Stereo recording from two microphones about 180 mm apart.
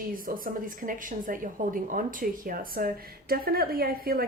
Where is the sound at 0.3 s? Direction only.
50° right (ahead or behind).